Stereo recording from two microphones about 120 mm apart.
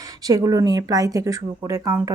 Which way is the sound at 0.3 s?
30° right (ahead or behind).